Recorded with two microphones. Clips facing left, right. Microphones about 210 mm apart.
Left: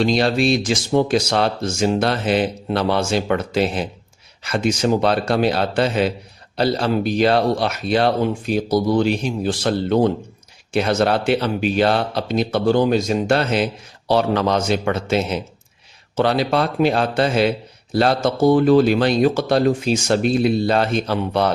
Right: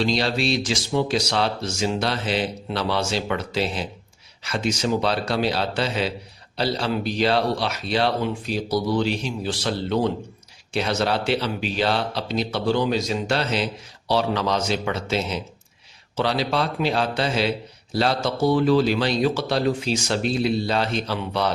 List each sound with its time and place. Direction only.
0.0 s speech: 50° left (ahead or behind)